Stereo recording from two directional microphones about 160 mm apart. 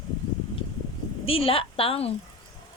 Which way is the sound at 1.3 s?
35° left (ahead or behind).